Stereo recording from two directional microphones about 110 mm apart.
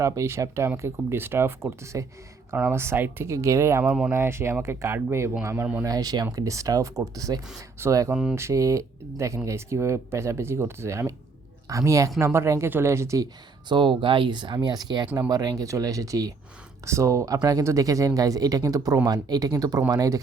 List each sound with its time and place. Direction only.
0.0 s speech: 25° right (ahead or behind)
8.1 s speech: 5° right (ahead or behind)
8.4 s speech: 25° right (ahead or behind)
13.7 s speech: 50° right (ahead or behind); by 20.2 s 30° right (ahead or behind)